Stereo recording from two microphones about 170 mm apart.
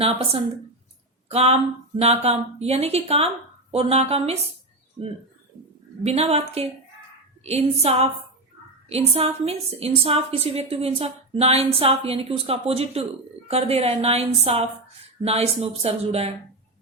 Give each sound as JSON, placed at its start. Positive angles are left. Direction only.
{"t": 0.0, "sound": "a woman's voice", "side_deg": -35}
{"t": 6.1, "sound": "a woman's voice", "side_deg": -35}